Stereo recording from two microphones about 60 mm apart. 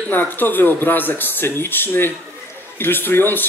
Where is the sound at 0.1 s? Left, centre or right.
Left.